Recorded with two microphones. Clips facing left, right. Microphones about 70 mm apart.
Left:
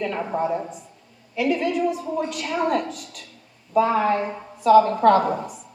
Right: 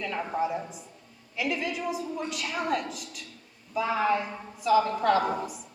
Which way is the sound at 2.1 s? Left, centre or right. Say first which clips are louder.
Left 7 dB; left.